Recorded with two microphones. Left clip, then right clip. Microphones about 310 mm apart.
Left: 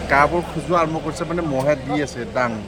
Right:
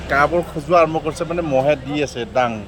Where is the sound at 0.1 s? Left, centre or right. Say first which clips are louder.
Even; centre.